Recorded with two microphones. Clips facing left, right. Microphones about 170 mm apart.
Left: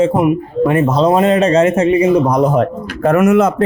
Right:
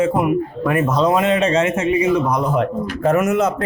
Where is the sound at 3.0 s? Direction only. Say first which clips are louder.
Left 6 dB; 60° left (ahead or behind).